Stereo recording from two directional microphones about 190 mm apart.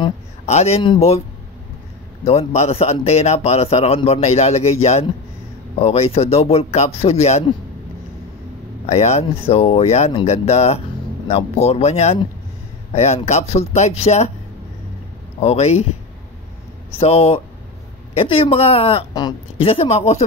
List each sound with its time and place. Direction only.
0.5 s speech: 35° left (ahead or behind)
2.2 s speech: 35° left (ahead or behind)
8.9 s speech: 35° left (ahead or behind)
15.4 s speech: 35° left (ahead or behind)
17.0 s speech: 30° left (ahead or behind)